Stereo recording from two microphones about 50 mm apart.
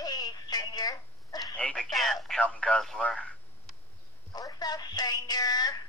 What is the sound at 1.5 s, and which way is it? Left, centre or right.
Telephone, left.